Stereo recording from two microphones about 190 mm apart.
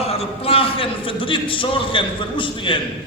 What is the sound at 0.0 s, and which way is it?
A man's voice, 30° left (ahead or behind).